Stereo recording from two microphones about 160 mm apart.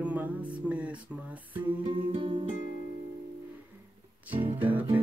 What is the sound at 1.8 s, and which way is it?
Music, 30° right (ahead or behind).